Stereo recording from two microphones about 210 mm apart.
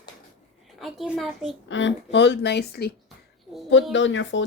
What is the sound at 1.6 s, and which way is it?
Speech, 60° left (ahead or behind).